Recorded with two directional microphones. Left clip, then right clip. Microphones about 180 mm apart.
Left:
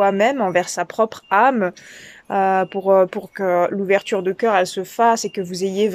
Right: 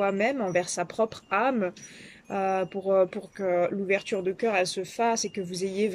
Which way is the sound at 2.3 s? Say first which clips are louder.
Left 10 dB; 45° left (ahead or behind).